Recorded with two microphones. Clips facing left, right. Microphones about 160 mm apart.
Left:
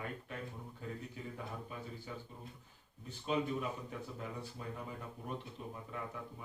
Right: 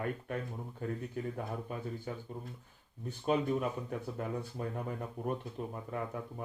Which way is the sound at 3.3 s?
55° right (ahead or behind).